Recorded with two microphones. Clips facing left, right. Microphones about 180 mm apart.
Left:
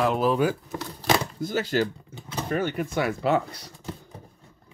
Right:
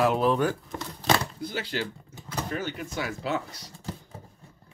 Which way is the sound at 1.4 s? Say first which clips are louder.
Left 7 dB; 45° left (ahead or behind).